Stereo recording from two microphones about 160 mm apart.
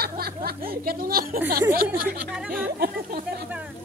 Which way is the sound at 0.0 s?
75° right (ahead or behind).